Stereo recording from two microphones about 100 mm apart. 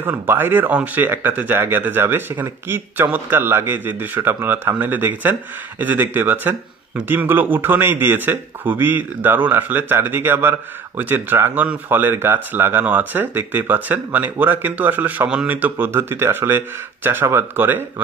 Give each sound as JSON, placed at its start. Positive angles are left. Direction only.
{"t": 0.0, "sound": "speech", "side_deg": -20}